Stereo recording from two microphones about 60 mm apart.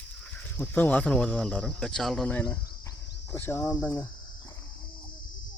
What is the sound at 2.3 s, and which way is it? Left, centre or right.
Speech, left.